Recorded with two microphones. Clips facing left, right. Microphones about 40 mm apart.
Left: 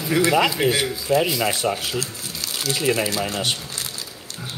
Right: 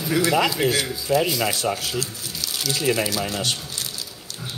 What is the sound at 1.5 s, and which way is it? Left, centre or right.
Speech, left.